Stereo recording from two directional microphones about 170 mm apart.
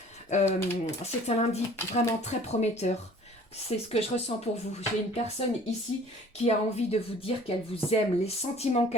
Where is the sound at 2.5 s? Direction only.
40° left (ahead or behind).